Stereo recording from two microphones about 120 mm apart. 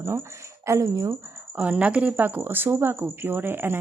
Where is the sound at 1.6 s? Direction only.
10° right (ahead or behind).